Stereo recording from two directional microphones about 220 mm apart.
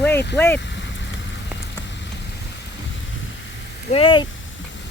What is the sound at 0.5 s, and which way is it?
Vehicle, 55° left (ahead or behind).